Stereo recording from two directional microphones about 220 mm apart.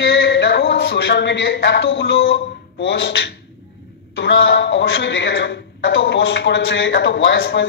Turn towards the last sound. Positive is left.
turn(degrees=50)  # may be behind; listen again after turning